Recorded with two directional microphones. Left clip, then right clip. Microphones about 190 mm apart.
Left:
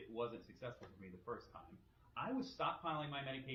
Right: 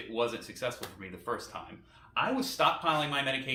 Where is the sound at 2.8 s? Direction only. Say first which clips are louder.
Right 15 dB; 20° right (ahead or behind).